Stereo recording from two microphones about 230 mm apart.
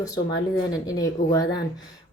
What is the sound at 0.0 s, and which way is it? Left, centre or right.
A woman's voice, centre.